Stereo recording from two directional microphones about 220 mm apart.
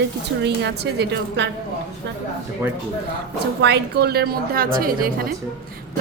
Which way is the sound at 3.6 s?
50° right (ahead or behind).